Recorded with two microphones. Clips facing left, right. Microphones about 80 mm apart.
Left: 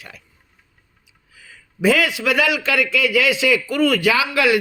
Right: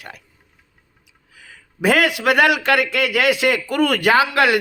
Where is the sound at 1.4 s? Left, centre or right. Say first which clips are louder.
Left 2 dB; right.